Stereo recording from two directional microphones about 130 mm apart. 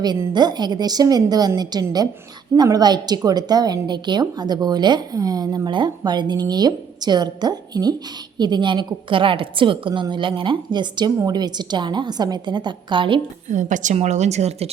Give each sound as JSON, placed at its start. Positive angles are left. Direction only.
{"t": 0.3, "sound": "a woman's voice", "side_deg": -35}
{"t": 13.5, "sound": "a woman's voice", "side_deg": -75}